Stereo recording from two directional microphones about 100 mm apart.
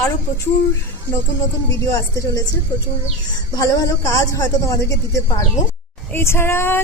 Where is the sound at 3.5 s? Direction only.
40° left (ahead or behind).